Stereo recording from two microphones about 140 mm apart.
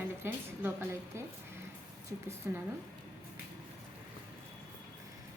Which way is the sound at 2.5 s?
15° right (ahead or behind).